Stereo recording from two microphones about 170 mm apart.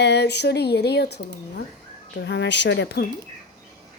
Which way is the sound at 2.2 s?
90° left.